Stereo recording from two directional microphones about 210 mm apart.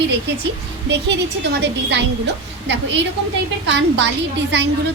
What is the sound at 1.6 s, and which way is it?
A woman's voice, 55° right (ahead or behind).